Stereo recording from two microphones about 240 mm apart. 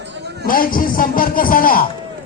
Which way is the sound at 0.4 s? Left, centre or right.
Left.